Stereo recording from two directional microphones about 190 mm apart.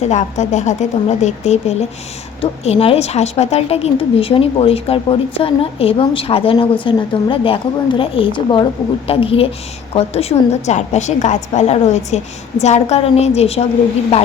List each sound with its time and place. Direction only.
0.0 s a woman's voice: 40° left (ahead or behind)